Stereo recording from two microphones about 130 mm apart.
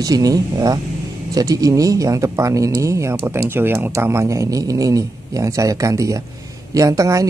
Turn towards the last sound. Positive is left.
turn(degrees=-25)  # may be behind; listen again after turning